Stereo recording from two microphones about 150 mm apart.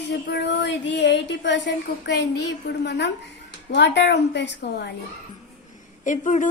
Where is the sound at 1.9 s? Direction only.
90° left.